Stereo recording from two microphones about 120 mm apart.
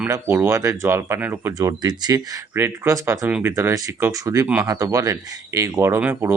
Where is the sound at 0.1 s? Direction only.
20° right (ahead or behind).